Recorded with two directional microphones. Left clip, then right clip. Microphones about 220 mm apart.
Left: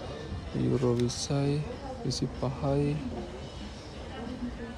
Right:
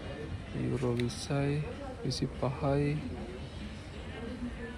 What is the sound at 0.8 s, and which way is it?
Speech, 15° left (ahead or behind).